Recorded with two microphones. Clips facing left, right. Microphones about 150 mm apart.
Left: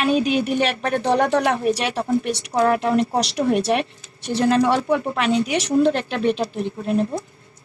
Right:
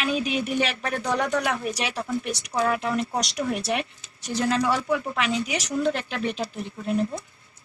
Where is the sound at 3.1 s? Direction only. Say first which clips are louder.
Left 7 dB; 30° left (ahead or behind).